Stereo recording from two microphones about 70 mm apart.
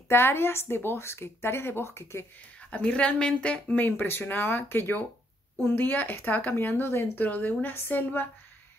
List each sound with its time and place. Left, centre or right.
0.1 s a woman's voice: left
2.7 s speech: centre
3.8 s speech: left
7.2 s speech: left